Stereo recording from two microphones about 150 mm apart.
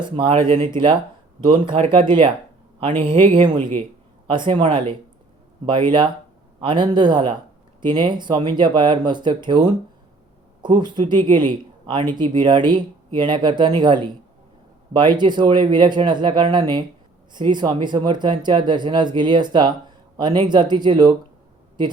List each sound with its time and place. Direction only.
0.0 s speech: 35° right (ahead or behind)
10.6 s speech: 30° right (ahead or behind)